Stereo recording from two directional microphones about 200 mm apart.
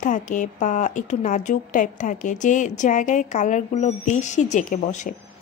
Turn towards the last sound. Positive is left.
turn(degrees=35)  # may be behind; listen again after turning